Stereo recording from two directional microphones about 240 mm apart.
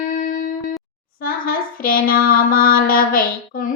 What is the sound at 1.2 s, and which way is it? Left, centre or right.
Child singing, left.